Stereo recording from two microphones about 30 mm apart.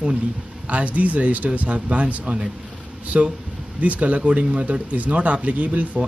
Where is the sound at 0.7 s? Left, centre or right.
Right.